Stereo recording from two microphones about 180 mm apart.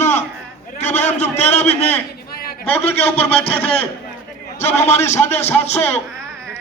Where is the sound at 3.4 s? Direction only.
35° left (ahead or behind).